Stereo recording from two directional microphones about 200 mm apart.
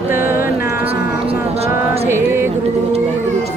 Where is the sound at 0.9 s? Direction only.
30° right (ahead or behind).